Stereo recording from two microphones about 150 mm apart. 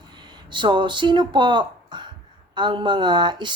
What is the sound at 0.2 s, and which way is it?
Speech, 30° right (ahead or behind).